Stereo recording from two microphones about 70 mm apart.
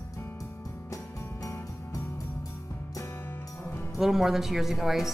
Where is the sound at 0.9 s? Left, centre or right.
Left.